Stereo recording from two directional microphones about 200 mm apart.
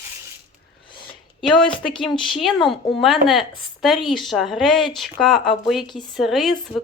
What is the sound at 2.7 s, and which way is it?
Speech, centre (ahead or behind).